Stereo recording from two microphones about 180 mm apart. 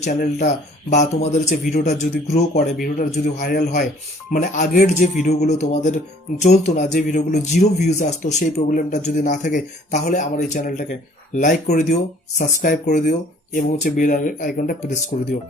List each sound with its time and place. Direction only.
0.0 s speech: 45° left (ahead or behind)